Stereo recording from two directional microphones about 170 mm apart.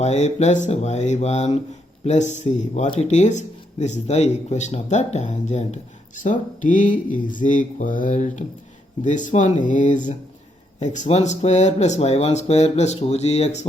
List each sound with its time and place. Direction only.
0.0 s speech: 40° left (ahead or behind)